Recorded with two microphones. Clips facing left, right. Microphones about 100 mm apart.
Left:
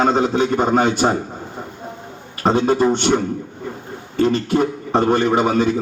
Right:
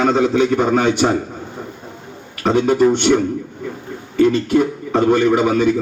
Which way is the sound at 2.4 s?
30° left (ahead or behind).